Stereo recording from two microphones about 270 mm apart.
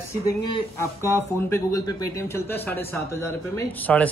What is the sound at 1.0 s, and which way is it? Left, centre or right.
Speech, centre.